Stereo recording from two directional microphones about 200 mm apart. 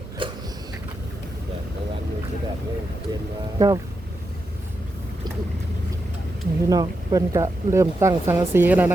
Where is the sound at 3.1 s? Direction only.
15° right (ahead or behind).